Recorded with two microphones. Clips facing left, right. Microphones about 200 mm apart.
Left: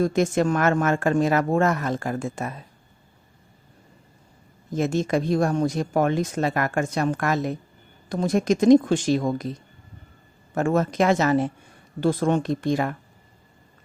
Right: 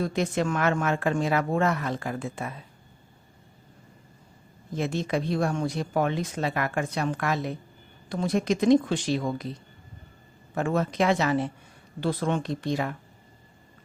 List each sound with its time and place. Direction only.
0.0 s speech: 45° left (ahead or behind)
4.7 s speech: 45° left (ahead or behind)
10.5 s speech: 45° left (ahead or behind)